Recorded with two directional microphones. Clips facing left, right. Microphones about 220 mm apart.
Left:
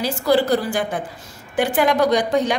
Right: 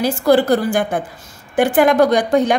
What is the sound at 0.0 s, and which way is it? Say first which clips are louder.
A woman's voice: right 4 dB; 50° right (ahead or behind).